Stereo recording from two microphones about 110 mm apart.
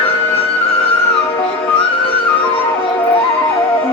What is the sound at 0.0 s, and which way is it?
Music, 60° left (ahead or behind).